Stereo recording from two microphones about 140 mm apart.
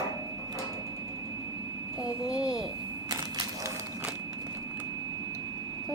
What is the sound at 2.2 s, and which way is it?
Speech, 5° right (ahead or behind).